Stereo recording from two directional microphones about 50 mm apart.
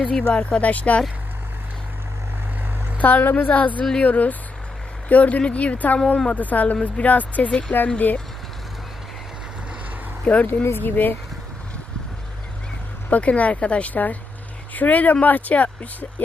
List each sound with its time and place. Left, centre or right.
0.0 s speech: centre
3.0 s speech: left
10.4 s speech: left
13.1 s speech: left